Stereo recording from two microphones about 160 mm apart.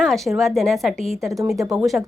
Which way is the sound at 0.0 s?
Centre (ahead or behind).